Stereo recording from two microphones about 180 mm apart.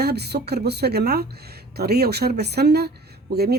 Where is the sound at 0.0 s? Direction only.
65° right (ahead or behind).